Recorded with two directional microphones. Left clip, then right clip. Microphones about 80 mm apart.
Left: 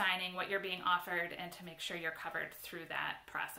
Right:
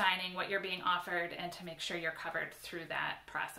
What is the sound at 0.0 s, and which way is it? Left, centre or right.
Speech, left.